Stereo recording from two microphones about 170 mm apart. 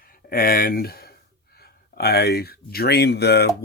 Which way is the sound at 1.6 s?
65° left (ahead or behind).